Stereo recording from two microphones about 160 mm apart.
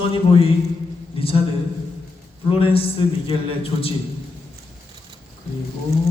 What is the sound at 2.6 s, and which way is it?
Speech, 35° left (ahead or behind).